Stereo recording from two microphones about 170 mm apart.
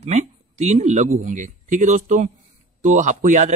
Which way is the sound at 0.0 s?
40° right (ahead or behind).